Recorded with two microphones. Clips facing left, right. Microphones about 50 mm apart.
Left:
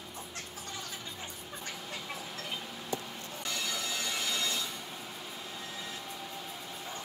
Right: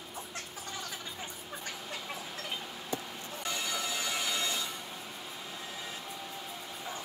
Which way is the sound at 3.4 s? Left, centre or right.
Centre.